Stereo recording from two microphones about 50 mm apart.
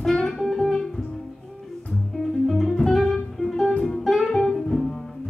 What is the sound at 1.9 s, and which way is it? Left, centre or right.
Music, centre.